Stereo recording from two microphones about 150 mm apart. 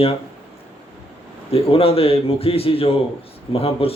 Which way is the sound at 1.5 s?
40° left (ahead or behind).